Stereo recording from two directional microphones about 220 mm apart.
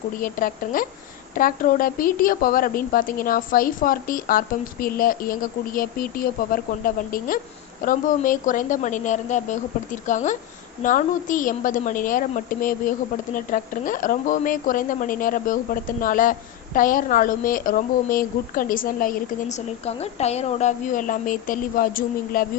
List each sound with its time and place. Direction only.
0.2 s a woman's voice: 40° left (ahead or behind)